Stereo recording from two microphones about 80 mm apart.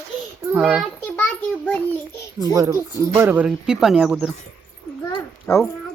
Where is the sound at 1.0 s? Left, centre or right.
Left.